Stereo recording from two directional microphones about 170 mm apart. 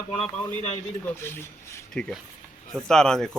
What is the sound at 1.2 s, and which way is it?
Speech, 15° left (ahead or behind).